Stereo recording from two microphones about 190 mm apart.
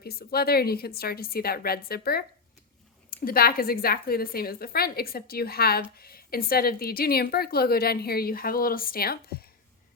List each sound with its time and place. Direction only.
0.0 s a woman's voice: 55° left (ahead or behind)